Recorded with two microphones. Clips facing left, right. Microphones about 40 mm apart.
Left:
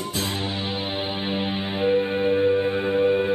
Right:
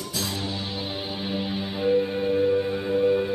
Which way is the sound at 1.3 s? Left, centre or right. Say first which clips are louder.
Left 3 dB; left.